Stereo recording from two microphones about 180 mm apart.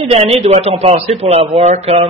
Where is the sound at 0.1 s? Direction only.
35° right (ahead or behind).